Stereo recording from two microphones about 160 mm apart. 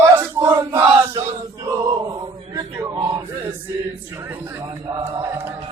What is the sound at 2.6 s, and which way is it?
Male singing, 20° right (ahead or behind).